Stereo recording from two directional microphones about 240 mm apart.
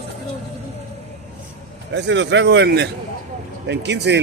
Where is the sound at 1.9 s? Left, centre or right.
Right.